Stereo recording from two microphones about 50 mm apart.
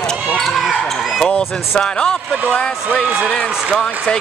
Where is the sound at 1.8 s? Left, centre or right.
Centre.